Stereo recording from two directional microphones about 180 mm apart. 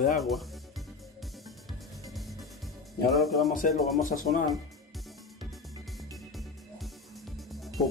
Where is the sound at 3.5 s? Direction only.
45° left (ahead or behind).